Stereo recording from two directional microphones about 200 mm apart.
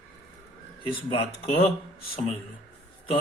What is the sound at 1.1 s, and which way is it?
Speech, 30° left (ahead or behind).